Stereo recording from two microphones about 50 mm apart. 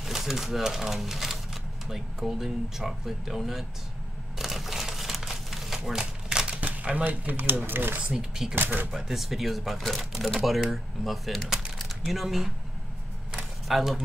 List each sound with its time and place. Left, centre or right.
0.0 s speech: centre
4.4 s a sound: centre
5.9 s speech: centre; by 8.0 s right
8.0 s speech: centre
8.5 s speech: right
8.9 s speech: centre
13.7 s speech: centre